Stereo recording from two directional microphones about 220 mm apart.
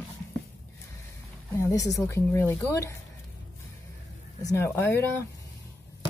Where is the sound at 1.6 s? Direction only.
15° left (ahead or behind).